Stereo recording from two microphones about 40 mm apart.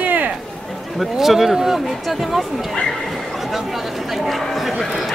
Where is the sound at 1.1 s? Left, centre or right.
Centre.